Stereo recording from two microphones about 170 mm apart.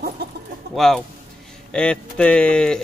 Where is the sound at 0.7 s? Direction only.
Centre (ahead or behind).